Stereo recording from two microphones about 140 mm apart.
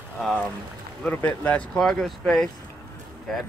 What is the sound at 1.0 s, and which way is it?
Speech, 10° left (ahead or behind).